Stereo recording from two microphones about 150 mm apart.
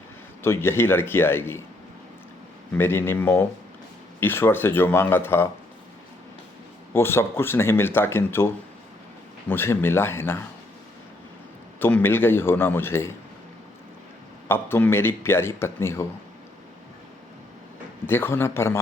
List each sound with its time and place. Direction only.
0.4 s a man's voice: 15° left (ahead or behind)
2.7 s a man's voice: 15° left (ahead or behind)
6.9 s a man's voice: 15° left (ahead or behind)
9.5 s a man's voice: 15° left (ahead or behind)
11.8 s a man's voice: 15° left (ahead or behind)
14.4 s a man's voice: 15° left (ahead or behind)
18.0 s a man's voice: 15° left (ahead or behind)